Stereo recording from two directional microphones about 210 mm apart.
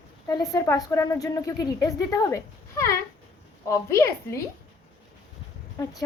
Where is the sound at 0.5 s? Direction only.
15° left (ahead or behind).